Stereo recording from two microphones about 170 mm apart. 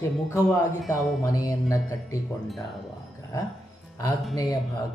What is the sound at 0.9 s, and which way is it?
Speech, centre (ahead or behind).